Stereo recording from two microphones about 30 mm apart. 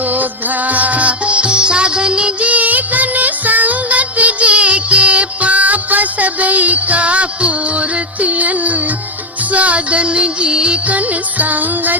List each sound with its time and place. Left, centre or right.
0.0 s music: right
2.4 s music: right
10.8 s music: right